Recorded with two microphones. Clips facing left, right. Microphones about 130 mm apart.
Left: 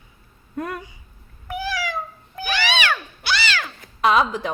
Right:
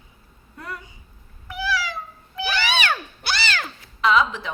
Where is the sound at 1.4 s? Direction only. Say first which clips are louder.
Even; 50° left (ahead or behind).